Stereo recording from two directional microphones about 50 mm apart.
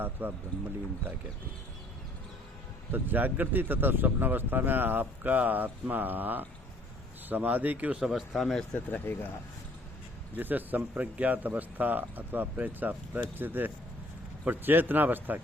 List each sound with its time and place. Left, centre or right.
0.0 s speech: right
2.9 s speech: right
7.9 s speech: centre
9.1 s speech: left
10.3 s speech: right